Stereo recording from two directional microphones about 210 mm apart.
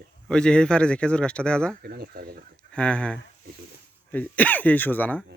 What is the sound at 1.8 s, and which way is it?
Speech, 50° right (ahead or behind).